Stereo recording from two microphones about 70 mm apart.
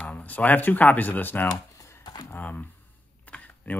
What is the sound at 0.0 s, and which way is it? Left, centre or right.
Speech, left.